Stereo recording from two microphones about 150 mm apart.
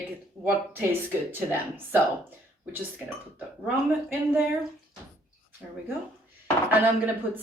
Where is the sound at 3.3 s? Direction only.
15° right (ahead or behind).